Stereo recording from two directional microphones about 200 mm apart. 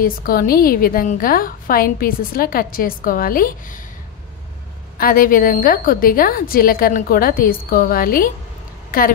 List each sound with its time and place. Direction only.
0.0 s a woman's voice: 45° left (ahead or behind)
4.9 s a woman's voice: 45° left (ahead or behind)